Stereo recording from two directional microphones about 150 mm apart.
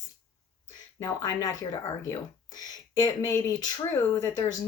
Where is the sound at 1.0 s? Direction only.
25° left (ahead or behind).